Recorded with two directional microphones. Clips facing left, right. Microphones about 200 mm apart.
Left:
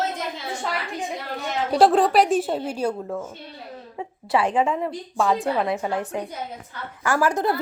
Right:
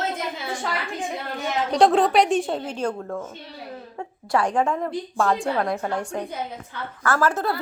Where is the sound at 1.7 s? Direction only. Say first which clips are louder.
Left 1 dB; 5° left (ahead or behind).